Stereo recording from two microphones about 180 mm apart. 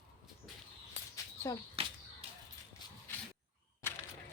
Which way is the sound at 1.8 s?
35° right (ahead or behind).